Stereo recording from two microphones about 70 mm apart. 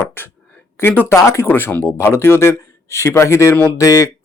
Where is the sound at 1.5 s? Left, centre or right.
Left.